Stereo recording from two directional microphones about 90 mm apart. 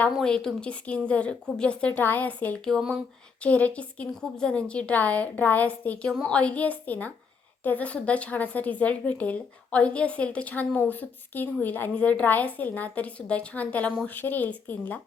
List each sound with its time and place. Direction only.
0.2 s speech: 10° left (ahead or behind)
2.6 s speech: 5° left (ahead or behind)